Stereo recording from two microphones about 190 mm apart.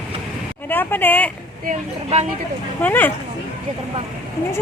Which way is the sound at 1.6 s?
35° right (ahead or behind).